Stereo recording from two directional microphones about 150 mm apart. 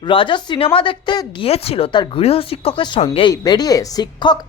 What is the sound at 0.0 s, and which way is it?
Speech, 35° left (ahead or behind).